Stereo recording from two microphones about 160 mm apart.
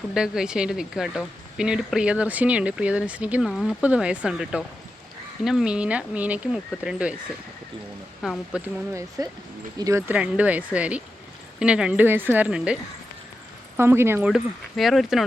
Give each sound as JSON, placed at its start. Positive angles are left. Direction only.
{"t": 0.1, "sound": "speech", "side_deg": -5}
{"t": 8.2, "sound": "speech", "side_deg": 0}
{"t": 8.6, "sound": "speech", "side_deg": -20}
{"t": 10.1, "sound": "speech", "side_deg": -10}
{"t": 13.7, "sound": "speech", "side_deg": -15}
{"t": 14.3, "sound": "speech", "side_deg": 0}